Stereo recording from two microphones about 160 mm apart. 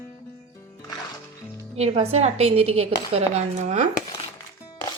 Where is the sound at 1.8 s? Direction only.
40° right (ahead or behind).